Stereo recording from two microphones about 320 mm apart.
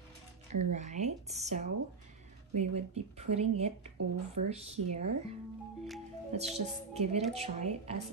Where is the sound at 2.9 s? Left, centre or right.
Centre.